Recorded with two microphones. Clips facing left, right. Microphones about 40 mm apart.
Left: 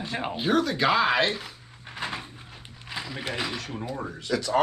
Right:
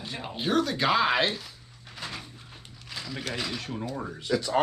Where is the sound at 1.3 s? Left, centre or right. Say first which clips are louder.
Left 3 dB; left.